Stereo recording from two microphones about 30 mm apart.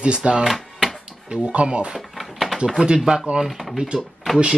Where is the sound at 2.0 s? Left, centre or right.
Centre.